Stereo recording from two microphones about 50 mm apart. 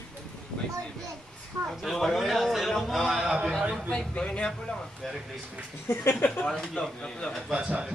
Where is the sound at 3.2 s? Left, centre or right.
Centre.